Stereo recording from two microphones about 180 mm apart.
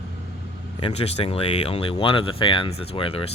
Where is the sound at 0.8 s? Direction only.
35° left (ahead or behind).